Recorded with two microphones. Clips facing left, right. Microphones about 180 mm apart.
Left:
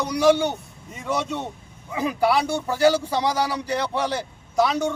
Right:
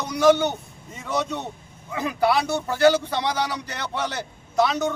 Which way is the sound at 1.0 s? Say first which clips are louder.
Left 1 dB; 10° left (ahead or behind).